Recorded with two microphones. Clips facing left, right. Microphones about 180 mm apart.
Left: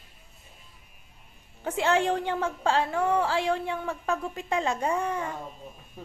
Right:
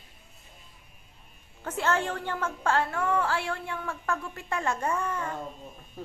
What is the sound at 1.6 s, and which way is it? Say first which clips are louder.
A woman's voice: left 4 dB; 15° left (ahead or behind).